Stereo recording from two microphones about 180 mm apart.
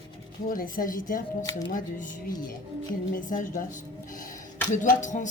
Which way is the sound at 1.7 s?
50° left (ahead or behind).